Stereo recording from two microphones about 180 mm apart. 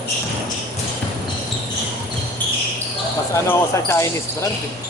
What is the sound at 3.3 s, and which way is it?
Speech, 15° left (ahead or behind).